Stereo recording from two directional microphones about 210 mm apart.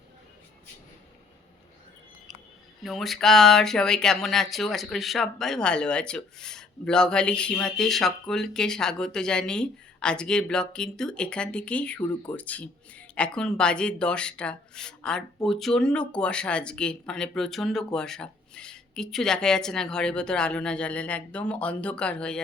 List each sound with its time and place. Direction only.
2.8 s speech: centre (ahead or behind)
11.9 s speech: 20° left (ahead or behind)
12.4 s speech: 5° left (ahead or behind)